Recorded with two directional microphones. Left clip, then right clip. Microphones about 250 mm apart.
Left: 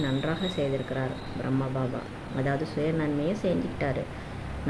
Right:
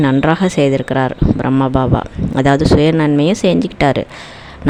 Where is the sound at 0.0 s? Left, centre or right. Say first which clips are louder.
Right 16 dB; right.